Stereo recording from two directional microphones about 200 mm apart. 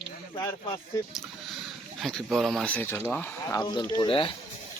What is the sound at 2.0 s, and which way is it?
Speech, centre (ahead or behind).